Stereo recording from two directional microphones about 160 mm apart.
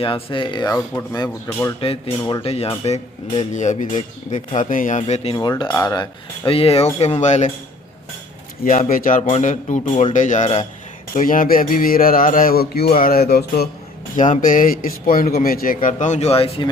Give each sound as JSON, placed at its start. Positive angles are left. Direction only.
{"t": 0.0, "sound": "speech", "side_deg": 35}
{"t": 1.8, "sound": "speech", "side_deg": 35}
{"t": 5.3, "sound": "speech", "side_deg": 25}
{"t": 5.6, "sound": "speech", "side_deg": 15}
{"t": 8.6, "sound": "a sound", "side_deg": 55}
{"t": 9.4, "sound": "speech", "side_deg": 50}
{"t": 11.1, "sound": "a sound", "side_deg": 55}
{"t": 14.2, "sound": "a sound", "side_deg": 55}
{"t": 15.4, "sound": "speech", "side_deg": 60}